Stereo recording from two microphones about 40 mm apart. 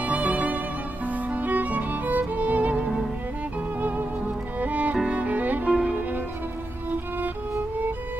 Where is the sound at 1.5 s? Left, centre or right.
Right.